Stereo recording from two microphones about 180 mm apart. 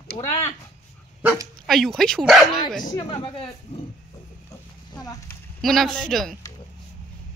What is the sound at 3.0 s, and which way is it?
Speech, 30° left (ahead or behind).